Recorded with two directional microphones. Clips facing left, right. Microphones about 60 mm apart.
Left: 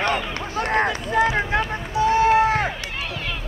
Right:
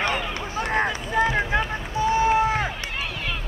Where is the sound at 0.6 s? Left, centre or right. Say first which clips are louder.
Left 3 dB; left.